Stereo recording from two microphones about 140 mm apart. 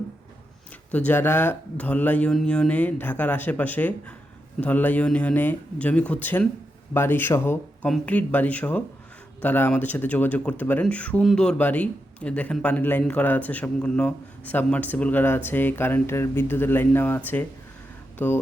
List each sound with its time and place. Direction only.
0.9 s a man's voice: 10° left (ahead or behind)